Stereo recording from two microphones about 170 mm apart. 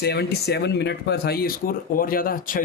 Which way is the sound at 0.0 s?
70° left (ahead or behind).